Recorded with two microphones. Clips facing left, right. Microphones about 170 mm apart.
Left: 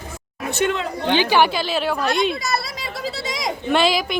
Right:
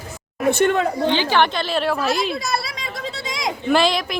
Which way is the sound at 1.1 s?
15° left (ahead or behind).